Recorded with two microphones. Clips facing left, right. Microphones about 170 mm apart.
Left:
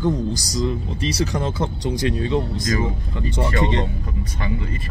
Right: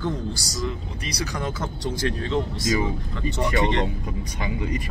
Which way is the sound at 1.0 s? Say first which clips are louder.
Left 6 dB; 25° left (ahead or behind).